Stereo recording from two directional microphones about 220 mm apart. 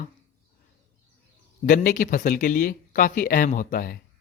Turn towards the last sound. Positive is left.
turn(degrees=40)  # may be behind; listen again after turning